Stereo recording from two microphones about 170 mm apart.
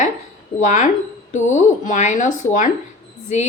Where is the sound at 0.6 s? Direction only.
45° left (ahead or behind).